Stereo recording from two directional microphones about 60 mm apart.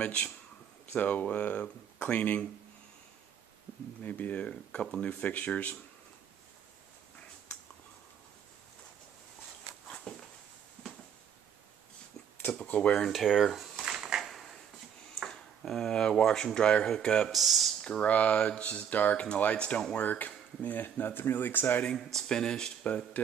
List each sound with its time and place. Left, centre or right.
0.0 s speech: left
4.0 s speech: left
9.8 s a sound: centre
12.6 s speech: left
13.1 s a sound: centre
15.2 s speech: centre
17.3 s speech: centre
17.8 s speech: left
21.9 s speech: centre